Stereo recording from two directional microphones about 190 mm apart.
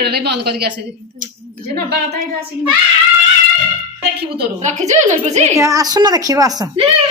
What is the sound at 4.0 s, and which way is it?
Speech, 55° right (ahead or behind).